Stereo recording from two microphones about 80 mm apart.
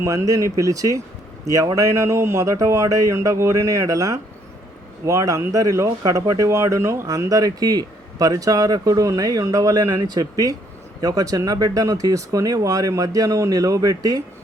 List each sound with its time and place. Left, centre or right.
0.0 s speech: right
9.9 s speech: right